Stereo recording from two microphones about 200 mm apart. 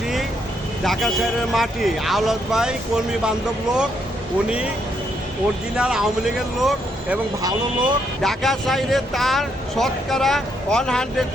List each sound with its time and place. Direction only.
0.9 s speech: centre (ahead or behind)
4.4 s speech: 5° right (ahead or behind)
5.7 s speech: 5° right (ahead or behind)
7.4 s speech: 20° right (ahead or behind)
8.2 s speech: centre (ahead or behind)